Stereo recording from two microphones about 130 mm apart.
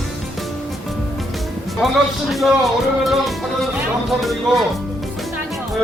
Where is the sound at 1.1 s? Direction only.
Centre (ahead or behind).